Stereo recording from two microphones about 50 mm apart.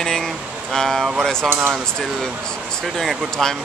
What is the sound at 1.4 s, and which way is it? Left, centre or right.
Speech, right.